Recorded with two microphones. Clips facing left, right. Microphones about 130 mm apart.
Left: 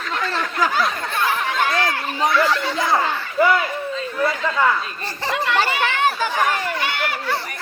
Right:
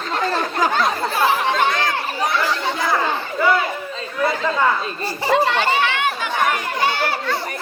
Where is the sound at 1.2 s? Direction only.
30° right (ahead or behind).